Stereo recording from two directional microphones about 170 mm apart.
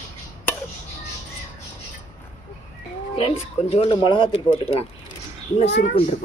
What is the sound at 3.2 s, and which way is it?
Speech, 35° left (ahead or behind).